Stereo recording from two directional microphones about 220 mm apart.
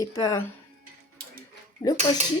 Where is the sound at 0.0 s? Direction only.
15° left (ahead or behind).